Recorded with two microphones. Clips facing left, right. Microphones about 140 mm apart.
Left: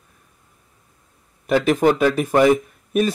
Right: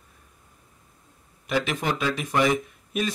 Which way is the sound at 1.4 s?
45° left (ahead or behind).